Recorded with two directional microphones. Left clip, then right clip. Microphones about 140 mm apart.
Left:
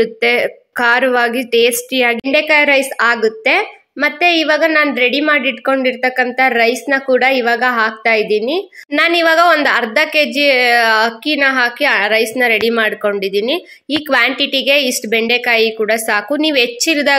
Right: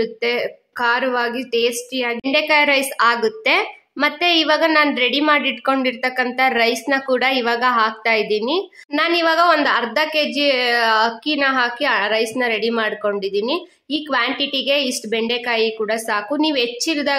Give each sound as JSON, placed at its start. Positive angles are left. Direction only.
{"t": 0.0, "sound": "a woman's voice", "side_deg": 25}